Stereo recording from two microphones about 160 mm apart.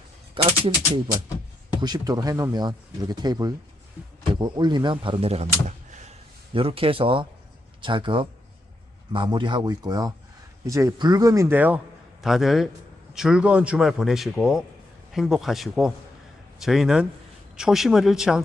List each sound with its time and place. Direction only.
0.4 s speech: 30° right (ahead or behind)
1.8 s speech: 25° right (ahead or behind); by 6.1 s 45° right (ahead or behind)
6.5 s a man's voice: 35° right (ahead or behind); by 18.3 s 5° right (ahead or behind)